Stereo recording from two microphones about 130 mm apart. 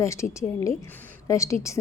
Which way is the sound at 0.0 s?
25° left (ahead or behind).